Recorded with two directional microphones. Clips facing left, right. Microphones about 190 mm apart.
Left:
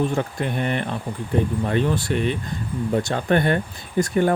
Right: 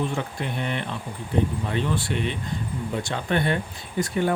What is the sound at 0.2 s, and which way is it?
Speech, 50° left (ahead or behind).